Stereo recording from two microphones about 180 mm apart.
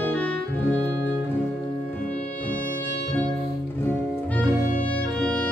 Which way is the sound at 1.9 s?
10° left (ahead or behind).